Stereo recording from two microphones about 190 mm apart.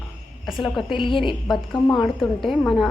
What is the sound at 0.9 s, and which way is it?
Speech, 25° left (ahead or behind).